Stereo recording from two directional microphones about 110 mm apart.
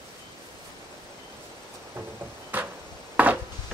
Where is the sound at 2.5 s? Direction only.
15° right (ahead or behind).